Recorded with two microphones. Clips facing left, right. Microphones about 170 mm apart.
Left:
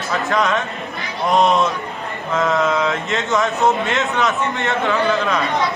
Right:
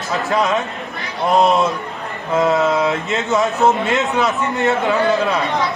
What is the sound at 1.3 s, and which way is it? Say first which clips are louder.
Speech: right 1 dB; centre (ahead or behind).